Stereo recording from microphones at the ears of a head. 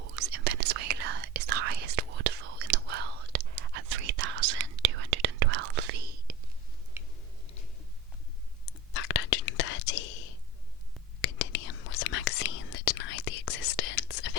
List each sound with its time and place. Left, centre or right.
0.0 s whispering: right
8.6 s whispering: left